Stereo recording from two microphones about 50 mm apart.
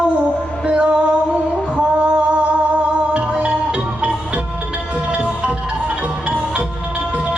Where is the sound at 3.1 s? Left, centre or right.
Right.